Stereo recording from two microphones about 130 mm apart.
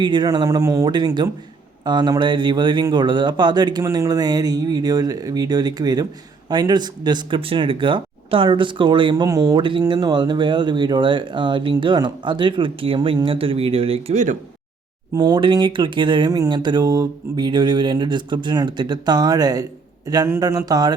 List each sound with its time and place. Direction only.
0.0 s speech: 35° right (ahead or behind)
9.2 s speech: 30° right (ahead or behind); by 14.2 s 45° right (ahead or behind)
15.1 s speech: 30° right (ahead or behind)